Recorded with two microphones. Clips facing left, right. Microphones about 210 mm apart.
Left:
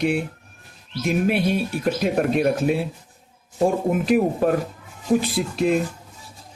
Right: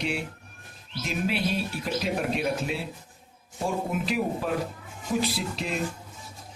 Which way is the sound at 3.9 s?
50° left (ahead or behind).